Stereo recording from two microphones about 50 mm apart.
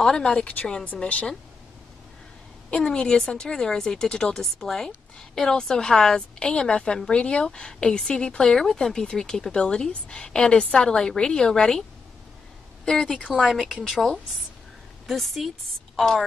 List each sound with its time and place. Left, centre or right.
0.2 s speech: centre
2.7 s speech: centre
12.8 s speech: centre